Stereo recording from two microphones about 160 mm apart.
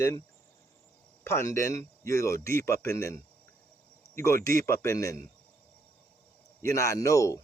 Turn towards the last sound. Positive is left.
turn(degrees=20)  # may be behind; listen again after turning